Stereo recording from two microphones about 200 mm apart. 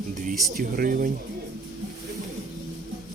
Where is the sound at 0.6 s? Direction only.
45° right (ahead or behind).